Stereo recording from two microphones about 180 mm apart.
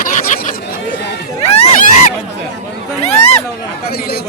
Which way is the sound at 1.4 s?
40° left (ahead or behind).